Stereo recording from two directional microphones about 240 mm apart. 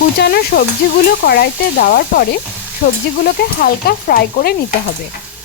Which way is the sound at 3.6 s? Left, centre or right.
Left.